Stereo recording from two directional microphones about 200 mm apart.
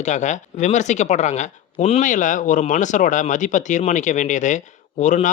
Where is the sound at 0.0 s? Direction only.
35° left (ahead or behind).